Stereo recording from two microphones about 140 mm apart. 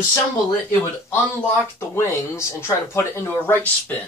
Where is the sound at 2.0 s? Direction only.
20° left (ahead or behind).